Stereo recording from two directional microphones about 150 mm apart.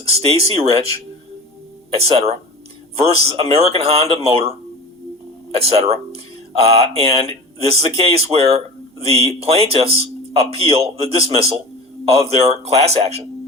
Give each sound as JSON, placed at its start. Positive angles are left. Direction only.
{"t": 0.0, "sound": "speech", "side_deg": -40}